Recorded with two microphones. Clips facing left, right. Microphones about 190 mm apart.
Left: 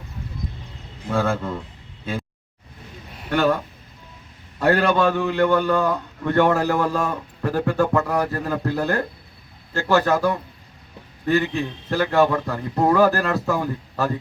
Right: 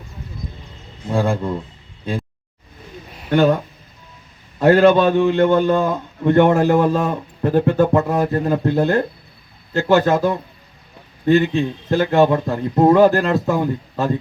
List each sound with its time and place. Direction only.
1.1 s speech: 15° right (ahead or behind)
3.2 s a man's voice: 20° right (ahead or behind)
4.6 s a man's voice: 20° right (ahead or behind)